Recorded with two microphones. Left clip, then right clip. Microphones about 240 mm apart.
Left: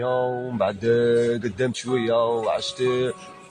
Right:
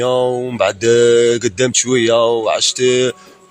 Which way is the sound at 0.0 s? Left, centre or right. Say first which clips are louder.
Right 8 dB; right.